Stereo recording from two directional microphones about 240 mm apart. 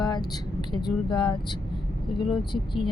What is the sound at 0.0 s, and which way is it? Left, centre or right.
Speech, centre.